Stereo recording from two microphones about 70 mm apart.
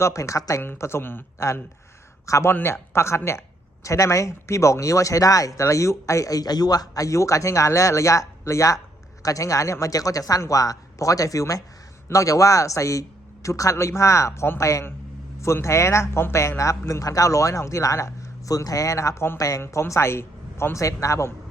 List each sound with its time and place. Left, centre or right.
0.0 s speech: left
0.6 s a man's voice: left
2.5 s a man's voice: left
19.4 s speech: left
19.6 s a man's voice: left